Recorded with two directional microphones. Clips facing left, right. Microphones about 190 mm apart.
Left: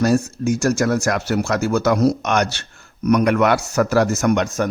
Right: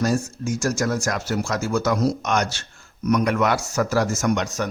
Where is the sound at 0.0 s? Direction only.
65° left (ahead or behind).